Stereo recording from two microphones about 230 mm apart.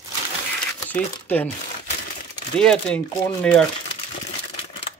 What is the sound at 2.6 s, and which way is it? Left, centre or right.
Speech, centre.